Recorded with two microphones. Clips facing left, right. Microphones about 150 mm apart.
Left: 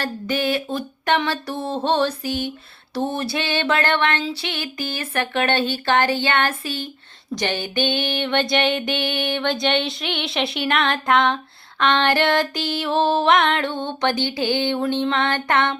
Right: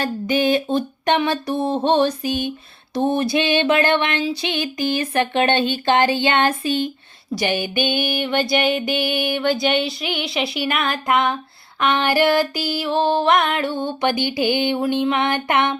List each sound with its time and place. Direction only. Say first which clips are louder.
0.0 s music: right 4 dB; 15° right (ahead or behind)